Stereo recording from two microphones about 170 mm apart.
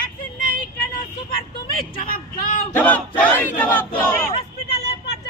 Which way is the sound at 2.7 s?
10° left (ahead or behind).